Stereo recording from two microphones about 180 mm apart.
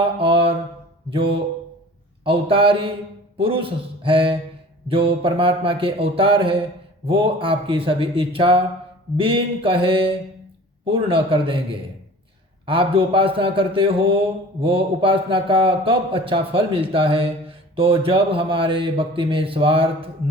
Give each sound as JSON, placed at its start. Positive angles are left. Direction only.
{"t": 0.2, "sound": "mantra", "side_deg": -30}
{"t": 2.2, "sound": "a man's voice", "side_deg": -30}